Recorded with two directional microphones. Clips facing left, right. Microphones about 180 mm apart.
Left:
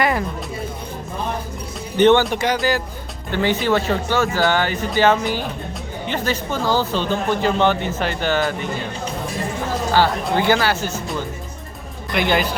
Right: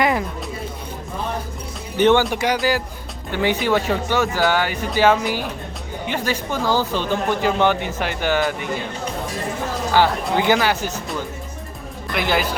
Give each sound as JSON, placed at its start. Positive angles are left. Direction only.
{"t": 0.0, "sound": "music", "side_deg": -15}
{"t": 2.0, "sound": "speech", "side_deg": -10}
{"t": 9.9, "sound": "speech", "side_deg": -15}
{"t": 12.1, "sound": "a man's voice", "side_deg": -5}